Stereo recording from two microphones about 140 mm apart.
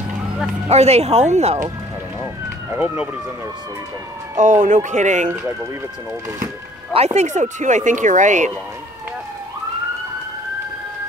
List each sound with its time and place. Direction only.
0.7 s speech: 50° right (ahead or behind)
2.7 s speech: 10° right (ahead or behind)
4.4 s speech: 65° right (ahead or behind)
6.9 s speech: 50° right (ahead or behind)